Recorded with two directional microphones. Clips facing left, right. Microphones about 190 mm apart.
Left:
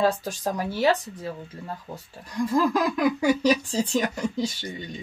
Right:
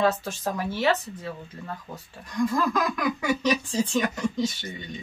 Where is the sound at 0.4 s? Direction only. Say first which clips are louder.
Left 1 dB; 15° left (ahead or behind).